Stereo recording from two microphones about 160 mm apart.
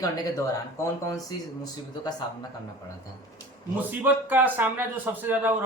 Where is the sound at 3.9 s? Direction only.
10° right (ahead or behind).